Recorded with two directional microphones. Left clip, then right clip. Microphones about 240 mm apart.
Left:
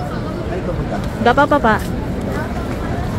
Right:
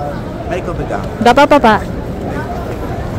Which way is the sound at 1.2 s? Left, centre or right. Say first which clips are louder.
Right 5 dB; centre.